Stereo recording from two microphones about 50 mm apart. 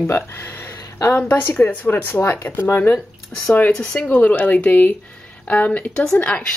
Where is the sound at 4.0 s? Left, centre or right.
Left.